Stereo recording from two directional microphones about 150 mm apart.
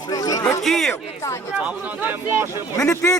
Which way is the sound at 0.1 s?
25° left (ahead or behind).